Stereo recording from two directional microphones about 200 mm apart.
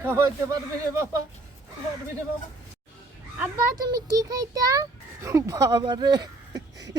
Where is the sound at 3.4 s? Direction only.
15° right (ahead or behind).